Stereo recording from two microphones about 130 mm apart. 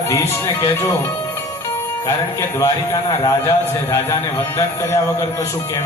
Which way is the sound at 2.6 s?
25° left (ahead or behind).